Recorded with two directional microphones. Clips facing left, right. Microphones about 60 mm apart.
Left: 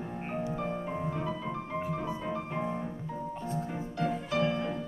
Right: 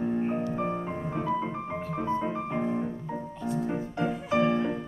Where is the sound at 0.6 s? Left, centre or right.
Right.